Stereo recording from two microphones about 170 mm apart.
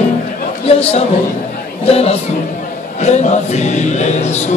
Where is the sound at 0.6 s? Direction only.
35° left (ahead or behind).